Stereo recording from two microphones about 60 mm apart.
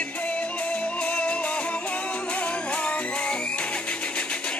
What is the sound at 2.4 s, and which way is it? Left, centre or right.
Music, left.